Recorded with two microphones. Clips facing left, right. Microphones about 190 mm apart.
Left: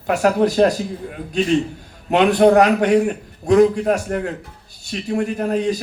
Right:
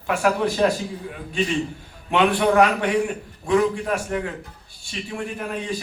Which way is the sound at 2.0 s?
40° left (ahead or behind).